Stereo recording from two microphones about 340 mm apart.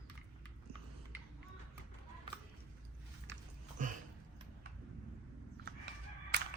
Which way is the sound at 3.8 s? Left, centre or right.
Right.